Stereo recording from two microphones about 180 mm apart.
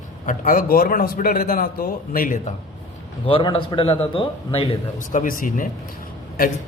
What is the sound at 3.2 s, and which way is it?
A man's voice, 30° left (ahead or behind).